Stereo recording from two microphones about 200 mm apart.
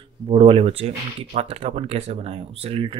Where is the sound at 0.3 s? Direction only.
30° right (ahead or behind).